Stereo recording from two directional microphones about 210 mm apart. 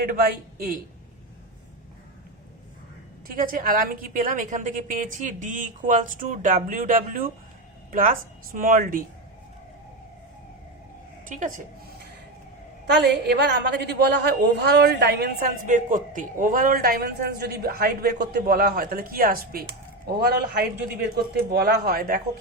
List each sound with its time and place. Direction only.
0.0 s a woman's voice: 45° right (ahead or behind)
3.2 s a woman's voice: 40° right (ahead or behind)
8.5 s a woman's voice: 40° right (ahead or behind)
11.3 s a woman's voice: 40° right (ahead or behind)
13.0 s a woman's voice: 50° right (ahead or behind)